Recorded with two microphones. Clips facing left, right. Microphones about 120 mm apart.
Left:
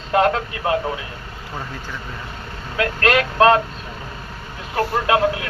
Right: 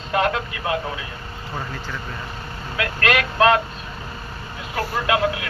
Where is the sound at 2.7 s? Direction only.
35° left (ahead or behind).